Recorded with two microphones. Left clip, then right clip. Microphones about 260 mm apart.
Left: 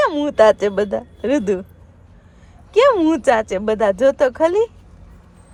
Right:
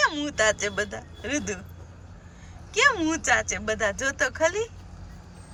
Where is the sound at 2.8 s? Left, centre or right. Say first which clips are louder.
Left 6 dB; centre.